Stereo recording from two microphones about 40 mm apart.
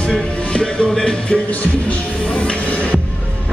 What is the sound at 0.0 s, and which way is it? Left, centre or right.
Music, left.